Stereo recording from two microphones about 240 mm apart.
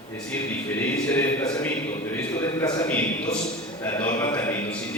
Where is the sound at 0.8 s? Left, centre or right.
Centre.